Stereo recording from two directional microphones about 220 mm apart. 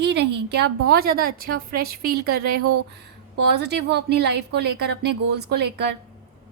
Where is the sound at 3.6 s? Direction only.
50° right (ahead or behind).